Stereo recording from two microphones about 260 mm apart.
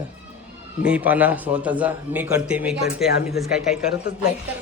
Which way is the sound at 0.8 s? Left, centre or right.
Centre.